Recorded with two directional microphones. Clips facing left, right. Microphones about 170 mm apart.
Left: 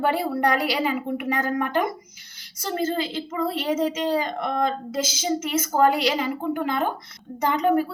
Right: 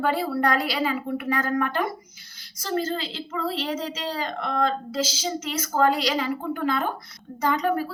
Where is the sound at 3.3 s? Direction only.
10° left (ahead or behind).